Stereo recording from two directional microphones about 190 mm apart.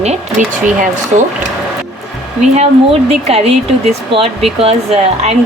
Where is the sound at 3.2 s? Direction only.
35° right (ahead or behind).